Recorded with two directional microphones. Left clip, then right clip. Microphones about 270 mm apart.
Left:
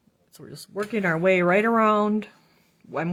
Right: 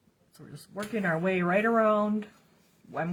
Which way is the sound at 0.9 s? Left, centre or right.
Left.